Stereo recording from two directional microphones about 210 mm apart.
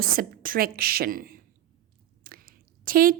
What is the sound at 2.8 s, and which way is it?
Speech, 45° right (ahead or behind).